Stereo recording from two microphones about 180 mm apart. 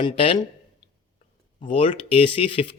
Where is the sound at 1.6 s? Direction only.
30° left (ahead or behind).